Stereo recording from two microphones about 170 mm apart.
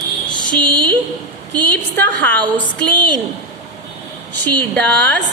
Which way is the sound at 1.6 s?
10° left (ahead or behind).